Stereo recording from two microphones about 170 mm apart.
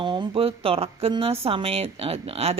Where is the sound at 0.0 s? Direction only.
30° right (ahead or behind).